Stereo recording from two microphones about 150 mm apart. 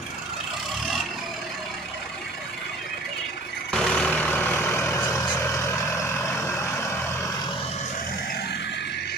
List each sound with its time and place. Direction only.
3.7 s vehicle: 5° left (ahead or behind)